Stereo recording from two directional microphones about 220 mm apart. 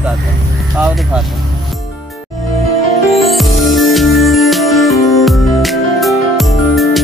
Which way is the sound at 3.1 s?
Centre (ahead or behind).